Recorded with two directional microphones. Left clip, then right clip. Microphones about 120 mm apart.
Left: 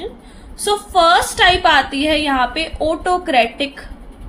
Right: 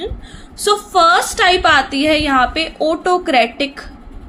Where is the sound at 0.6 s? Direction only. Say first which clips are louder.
Right 2 dB; 35° right (ahead or behind).